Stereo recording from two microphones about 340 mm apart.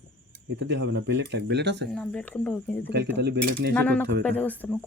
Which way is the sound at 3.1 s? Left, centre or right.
Right.